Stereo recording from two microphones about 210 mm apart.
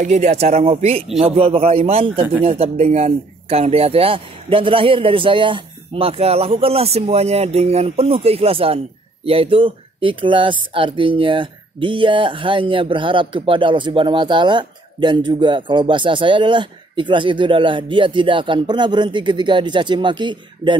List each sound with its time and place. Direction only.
0.0 s speech: 30° right (ahead or behind)